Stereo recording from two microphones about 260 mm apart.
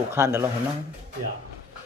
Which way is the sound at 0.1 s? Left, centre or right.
Centre.